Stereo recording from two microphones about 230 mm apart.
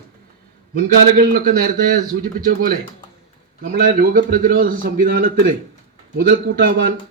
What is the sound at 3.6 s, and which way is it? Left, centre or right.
A man's voice, right.